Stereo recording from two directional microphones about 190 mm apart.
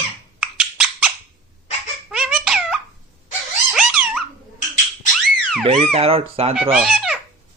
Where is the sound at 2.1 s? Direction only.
5° right (ahead or behind).